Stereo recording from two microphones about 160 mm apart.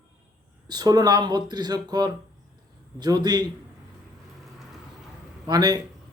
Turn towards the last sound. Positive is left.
turn(degrees=-25)  # may be behind; listen again after turning